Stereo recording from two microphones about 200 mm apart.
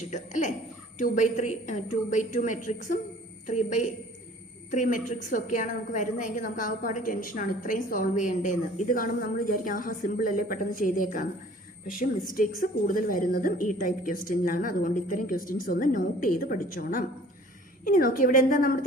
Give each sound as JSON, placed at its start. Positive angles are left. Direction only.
{"t": 0.1, "sound": "a woman's voice", "side_deg": 40}